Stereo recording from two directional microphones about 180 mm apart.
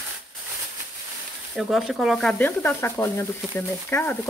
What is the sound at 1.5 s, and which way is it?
Speech, centre (ahead or behind).